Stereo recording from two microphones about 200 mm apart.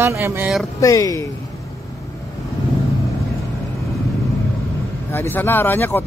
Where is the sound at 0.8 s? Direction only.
15° left (ahead or behind).